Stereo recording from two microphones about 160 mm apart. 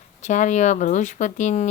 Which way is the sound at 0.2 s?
50° left (ahead or behind).